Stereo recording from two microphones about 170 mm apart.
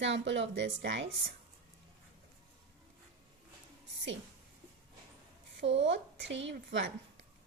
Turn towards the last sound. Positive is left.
turn(degrees=-80)